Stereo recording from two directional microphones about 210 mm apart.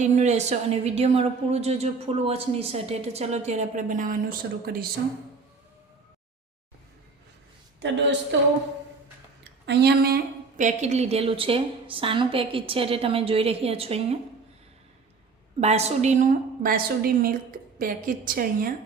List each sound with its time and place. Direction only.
0.0 s a woman's voice: 35° right (ahead or behind)
7.8 s a woman's voice: 55° right (ahead or behind)
9.6 s a woman's voice: 50° right (ahead or behind)
10.6 s a woman's voice: 35° right (ahead or behind)
15.6 s a woman's voice: 30° right (ahead or behind)
16.6 s a woman's voice: 45° right (ahead or behind)